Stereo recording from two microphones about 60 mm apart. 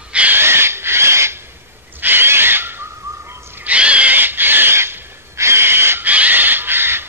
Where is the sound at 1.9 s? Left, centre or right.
Right.